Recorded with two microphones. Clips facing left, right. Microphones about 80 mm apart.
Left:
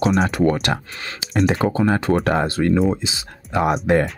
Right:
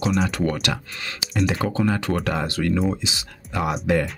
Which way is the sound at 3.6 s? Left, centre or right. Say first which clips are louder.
Left 4 dB; left.